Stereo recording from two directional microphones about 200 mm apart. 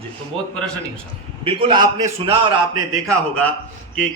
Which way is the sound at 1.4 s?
25° right (ahead or behind).